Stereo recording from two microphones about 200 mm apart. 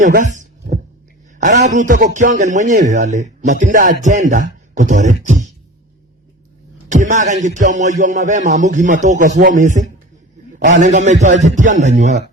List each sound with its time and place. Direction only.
0.2 s heart sounds: 40° right (ahead or behind)
1.4 s a man's voice: 35° right (ahead or behind)
4.0 s beatboxing: 35° right (ahead or behind)
6.8 s a man's voice: 35° right (ahead or behind)